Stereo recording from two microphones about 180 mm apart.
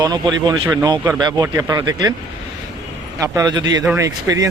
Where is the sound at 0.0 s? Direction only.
20° right (ahead or behind).